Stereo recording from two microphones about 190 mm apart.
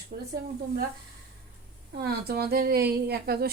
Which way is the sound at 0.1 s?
40° right (ahead or behind).